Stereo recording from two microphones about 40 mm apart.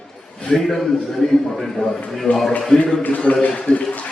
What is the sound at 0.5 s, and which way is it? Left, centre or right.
A man's voice, centre.